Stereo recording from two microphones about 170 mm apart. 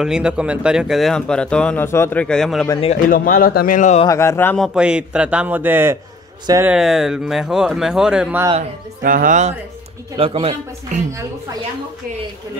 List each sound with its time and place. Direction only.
0.0 s speech: 5° right (ahead or behind)
3.1 s speech: 55° left (ahead or behind)
4.1 s speech: 15° left (ahead or behind)
4.6 s a man's voice: 5° right (ahead or behind)
6.7 s speech: centre (ahead or behind)
8.5 s speech: 55° right (ahead or behind)
10.1 s speech: 35° right (ahead or behind)